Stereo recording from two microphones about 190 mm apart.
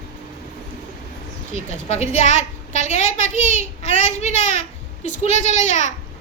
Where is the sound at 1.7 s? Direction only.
35° left (ahead or behind).